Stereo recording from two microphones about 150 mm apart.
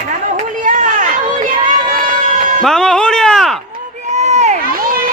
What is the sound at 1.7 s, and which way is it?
Run, 70° right (ahead or behind).